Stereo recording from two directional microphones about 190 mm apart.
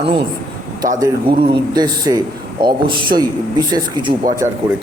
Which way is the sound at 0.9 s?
20° right (ahead or behind).